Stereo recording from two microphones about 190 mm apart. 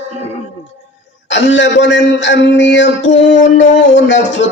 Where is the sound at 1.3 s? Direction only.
75° left (ahead or behind).